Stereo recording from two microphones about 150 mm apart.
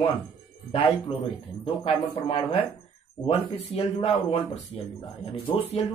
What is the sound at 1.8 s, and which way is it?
Speech, 40° left (ahead or behind).